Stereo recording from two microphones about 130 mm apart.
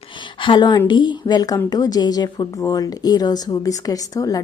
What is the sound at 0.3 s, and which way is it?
A woman's voice, 40° left (ahead or behind).